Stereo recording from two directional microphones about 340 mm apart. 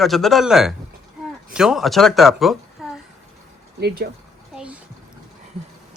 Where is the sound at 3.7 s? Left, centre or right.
Right.